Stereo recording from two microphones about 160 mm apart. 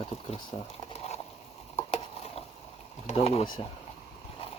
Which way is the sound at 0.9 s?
40° left (ahead or behind).